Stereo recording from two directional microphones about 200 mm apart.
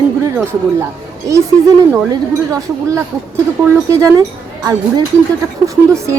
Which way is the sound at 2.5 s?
15° right (ahead or behind).